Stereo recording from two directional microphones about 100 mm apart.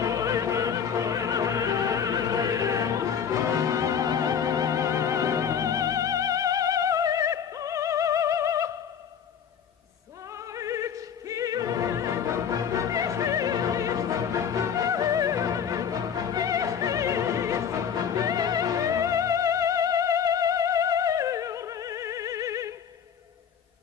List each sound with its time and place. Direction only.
0.0 s opera: 35° right (ahead or behind)
10.3 s opera: 30° right (ahead or behind)
18.1 s music: 35° right (ahead or behind)